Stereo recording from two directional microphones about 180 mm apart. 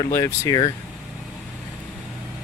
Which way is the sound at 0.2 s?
15° left (ahead or behind).